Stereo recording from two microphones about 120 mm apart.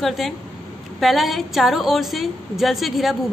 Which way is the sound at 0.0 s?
Centre (ahead or behind).